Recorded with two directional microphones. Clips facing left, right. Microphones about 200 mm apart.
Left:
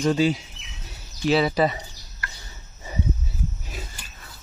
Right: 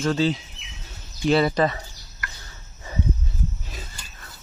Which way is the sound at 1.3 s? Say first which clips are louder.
Right 1 dB; centre (ahead or behind).